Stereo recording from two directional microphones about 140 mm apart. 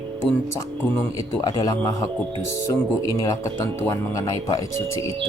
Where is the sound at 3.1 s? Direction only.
25° left (ahead or behind).